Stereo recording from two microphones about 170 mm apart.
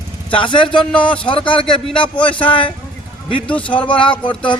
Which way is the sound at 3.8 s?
30° left (ahead or behind).